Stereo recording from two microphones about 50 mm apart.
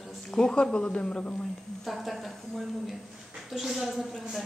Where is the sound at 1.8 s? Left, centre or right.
Centre.